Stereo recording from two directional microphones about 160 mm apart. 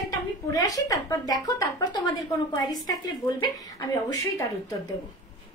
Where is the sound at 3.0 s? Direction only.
25° left (ahead or behind).